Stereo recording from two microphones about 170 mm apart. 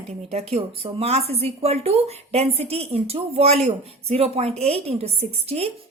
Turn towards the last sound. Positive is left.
turn(degrees=-35)  # may be behind; listen again after turning